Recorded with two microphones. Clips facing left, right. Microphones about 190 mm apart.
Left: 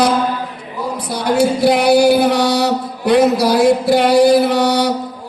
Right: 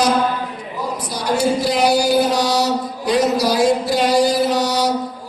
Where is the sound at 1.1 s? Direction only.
60° left (ahead or behind).